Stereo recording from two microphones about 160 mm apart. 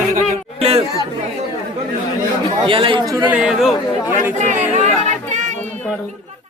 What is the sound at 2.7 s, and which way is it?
Speech, 35° right (ahead or behind).